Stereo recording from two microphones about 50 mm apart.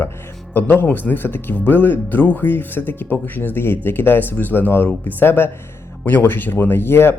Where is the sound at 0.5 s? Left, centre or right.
Left.